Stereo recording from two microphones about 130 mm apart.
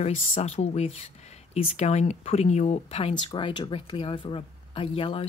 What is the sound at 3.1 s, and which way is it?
Speech, 40° left (ahead or behind).